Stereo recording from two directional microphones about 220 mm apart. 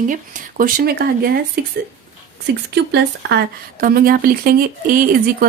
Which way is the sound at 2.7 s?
50° right (ahead or behind).